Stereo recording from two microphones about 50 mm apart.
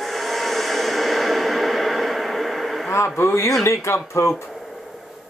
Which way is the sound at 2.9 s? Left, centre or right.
Left.